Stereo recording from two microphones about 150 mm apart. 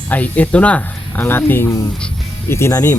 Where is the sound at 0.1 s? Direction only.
10° left (ahead or behind).